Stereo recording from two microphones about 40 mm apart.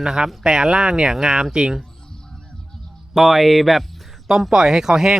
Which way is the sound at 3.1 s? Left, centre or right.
Centre.